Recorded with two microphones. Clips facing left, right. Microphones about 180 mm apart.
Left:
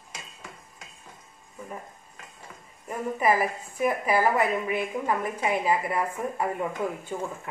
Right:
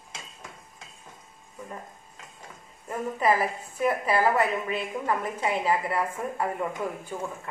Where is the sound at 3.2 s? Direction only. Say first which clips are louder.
Even; 15° left (ahead or behind).